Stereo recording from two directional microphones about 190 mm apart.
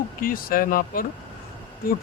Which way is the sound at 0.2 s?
50° left (ahead or behind).